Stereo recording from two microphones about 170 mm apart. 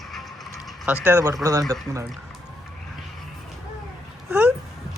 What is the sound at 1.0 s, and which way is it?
Speech, 15° right (ahead or behind).